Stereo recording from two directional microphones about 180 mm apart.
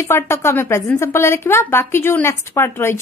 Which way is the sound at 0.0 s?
15° left (ahead or behind).